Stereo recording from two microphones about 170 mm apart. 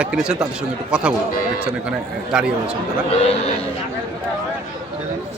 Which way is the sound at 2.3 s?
5° right (ahead or behind).